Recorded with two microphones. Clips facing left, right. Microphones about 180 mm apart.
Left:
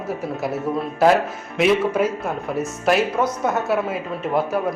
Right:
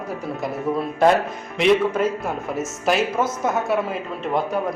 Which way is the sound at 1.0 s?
5° left (ahead or behind).